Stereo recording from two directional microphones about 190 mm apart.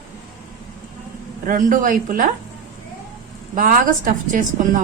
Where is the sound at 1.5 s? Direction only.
45° right (ahead or behind).